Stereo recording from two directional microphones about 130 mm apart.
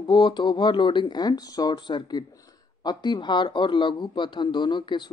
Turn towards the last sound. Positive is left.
turn(degrees=35)  # may be behind; listen again after turning